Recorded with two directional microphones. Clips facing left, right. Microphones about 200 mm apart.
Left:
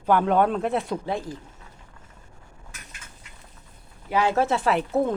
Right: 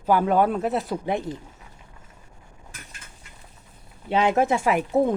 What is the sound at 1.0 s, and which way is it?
Speech, 20° right (ahead or behind).